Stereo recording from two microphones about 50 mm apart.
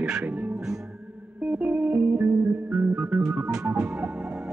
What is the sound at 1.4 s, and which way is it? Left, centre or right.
Music, right.